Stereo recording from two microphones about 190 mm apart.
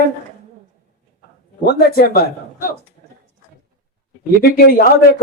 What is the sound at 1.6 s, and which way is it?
A man's voice, 55° left (ahead or behind).